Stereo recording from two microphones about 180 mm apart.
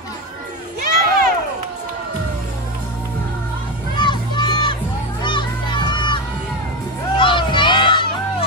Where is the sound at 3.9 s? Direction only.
25° left (ahead or behind).